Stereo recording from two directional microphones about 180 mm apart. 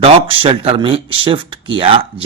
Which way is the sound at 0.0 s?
30° right (ahead or behind).